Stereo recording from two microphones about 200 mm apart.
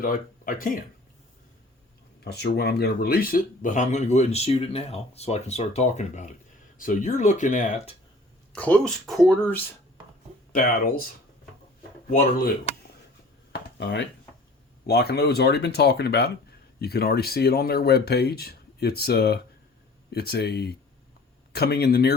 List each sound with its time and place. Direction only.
0.0 s speech: 45° left (ahead or behind)
2.2 s speech: 55° left (ahead or behind); by 7.9 s 40° left (ahead or behind)
8.5 s speech: 5° left (ahead or behind)
10.5 s speech: 45° left (ahead or behind)
12.1 s speech: 35° left (ahead or behind)
13.5 s a sound: 60° left (ahead or behind)
14.8 s speech: 55° left (ahead or behind)